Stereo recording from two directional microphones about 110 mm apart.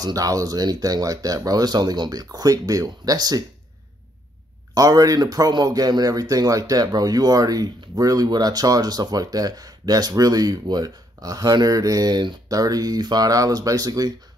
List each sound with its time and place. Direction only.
0.0 s speech: 35° right (ahead or behind)
4.7 s speech: 30° right (ahead or behind)